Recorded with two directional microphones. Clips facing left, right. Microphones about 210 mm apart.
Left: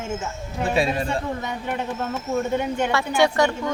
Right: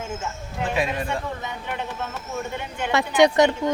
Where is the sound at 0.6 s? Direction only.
30° left (ahead or behind).